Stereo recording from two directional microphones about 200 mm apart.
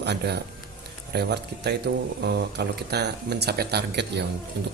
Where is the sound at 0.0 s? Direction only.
55° right (ahead or behind).